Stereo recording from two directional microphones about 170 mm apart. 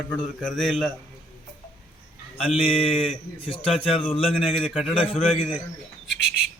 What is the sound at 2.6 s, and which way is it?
A man's voice, 35° left (ahead or behind).